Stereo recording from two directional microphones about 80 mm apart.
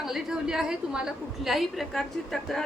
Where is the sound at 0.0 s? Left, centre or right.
Centre.